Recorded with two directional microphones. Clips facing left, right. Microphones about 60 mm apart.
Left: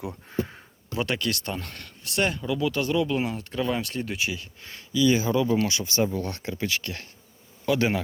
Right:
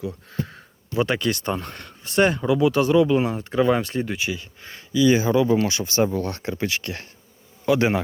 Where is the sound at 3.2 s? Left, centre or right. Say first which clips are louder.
Right 8 dB; right.